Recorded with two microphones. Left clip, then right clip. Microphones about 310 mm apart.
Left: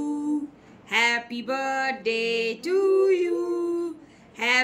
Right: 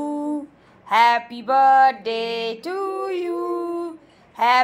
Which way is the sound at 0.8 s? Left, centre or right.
Centre.